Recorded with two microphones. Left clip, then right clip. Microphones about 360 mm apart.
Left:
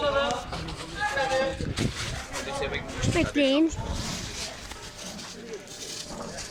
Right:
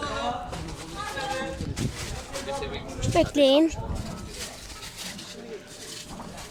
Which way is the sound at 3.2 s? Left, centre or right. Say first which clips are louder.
Right 5 dB; centre.